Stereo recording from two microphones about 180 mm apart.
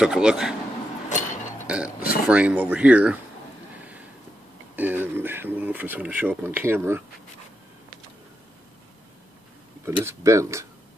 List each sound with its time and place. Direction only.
0.0 s a man's voice: 5° right (ahead or behind)
1.0 s vehicle: 45° left (ahead or behind)
1.7 s speech: 5° right (ahead or behind)
4.7 s speech: 10° right (ahead or behind)
9.8 s speech: 15° right (ahead or behind)